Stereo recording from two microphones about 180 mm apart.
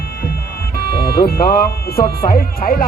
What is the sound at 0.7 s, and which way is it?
Speech, 55° left (ahead or behind).